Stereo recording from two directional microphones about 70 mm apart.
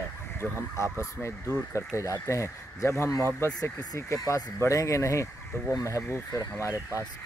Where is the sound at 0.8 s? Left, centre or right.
Left.